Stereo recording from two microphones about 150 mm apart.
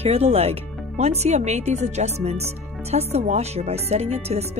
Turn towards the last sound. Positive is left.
turn(degrees=-45)  # may be behind; listen again after turning